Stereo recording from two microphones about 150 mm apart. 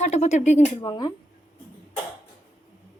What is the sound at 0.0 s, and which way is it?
Speech, 50° left (ahead or behind).